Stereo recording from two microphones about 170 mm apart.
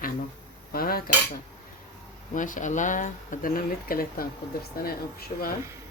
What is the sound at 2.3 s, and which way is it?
Speech, 50° left (ahead or behind).